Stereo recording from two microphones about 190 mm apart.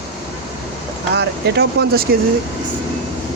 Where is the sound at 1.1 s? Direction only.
60° right (ahead or behind).